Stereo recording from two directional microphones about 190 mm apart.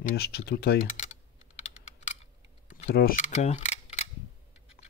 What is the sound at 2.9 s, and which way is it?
Speech, 55° left (ahead or behind).